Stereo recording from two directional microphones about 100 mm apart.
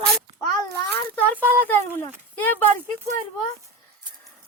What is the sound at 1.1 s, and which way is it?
Speech, 15° left (ahead or behind).